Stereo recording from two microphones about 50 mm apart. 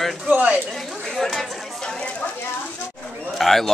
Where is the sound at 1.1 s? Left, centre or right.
Centre.